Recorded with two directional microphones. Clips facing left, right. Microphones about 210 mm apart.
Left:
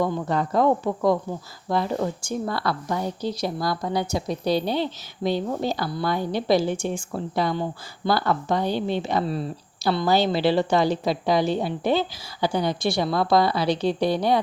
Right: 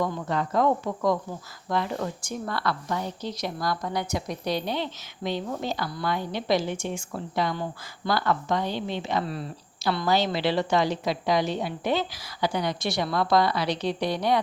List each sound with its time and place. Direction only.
0.0 s a woman's voice: 35° left (ahead or behind)